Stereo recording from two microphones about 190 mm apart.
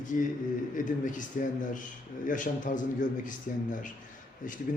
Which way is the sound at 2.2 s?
45° left (ahead or behind).